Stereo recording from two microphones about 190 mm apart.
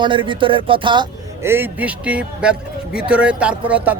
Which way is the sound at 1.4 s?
10° right (ahead or behind).